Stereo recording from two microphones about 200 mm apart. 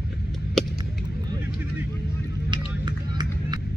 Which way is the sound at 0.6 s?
Centre (ahead or behind).